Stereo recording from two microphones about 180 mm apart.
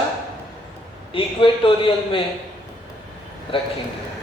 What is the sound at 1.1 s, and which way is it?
Speech, 30° left (ahead or behind).